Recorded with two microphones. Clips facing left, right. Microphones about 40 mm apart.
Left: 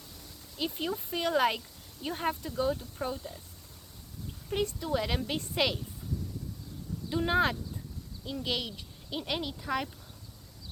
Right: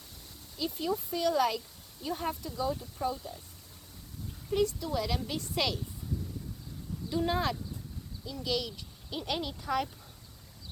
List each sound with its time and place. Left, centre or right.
0.6 s speech: left
4.5 s speech: left
7.1 s speech: left
9.0 s speech: centre